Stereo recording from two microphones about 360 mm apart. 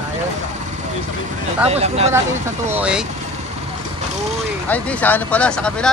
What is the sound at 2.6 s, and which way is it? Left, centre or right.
Speech, centre.